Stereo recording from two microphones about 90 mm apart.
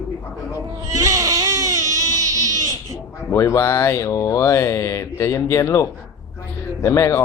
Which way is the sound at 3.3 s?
35° left (ahead or behind).